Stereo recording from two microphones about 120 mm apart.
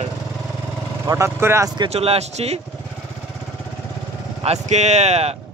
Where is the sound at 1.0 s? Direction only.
25° right (ahead or behind).